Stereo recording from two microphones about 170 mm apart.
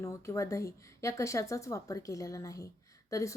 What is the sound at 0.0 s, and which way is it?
A woman's voice, 15° left (ahead or behind).